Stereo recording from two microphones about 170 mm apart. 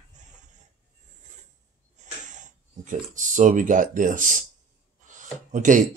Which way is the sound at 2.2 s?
45° right (ahead or behind).